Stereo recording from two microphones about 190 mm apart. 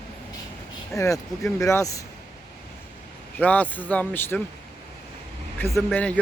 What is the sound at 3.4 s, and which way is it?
Speech, 10° left (ahead or behind).